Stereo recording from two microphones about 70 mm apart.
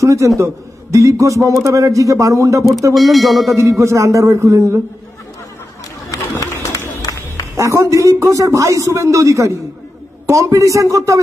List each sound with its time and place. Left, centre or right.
0.0 s a man's voice: right
2.9 s a sound: centre
3.8 s a man's voice: right
6.0 s run: left
6.5 s a sound: left
7.5 s a man's voice: right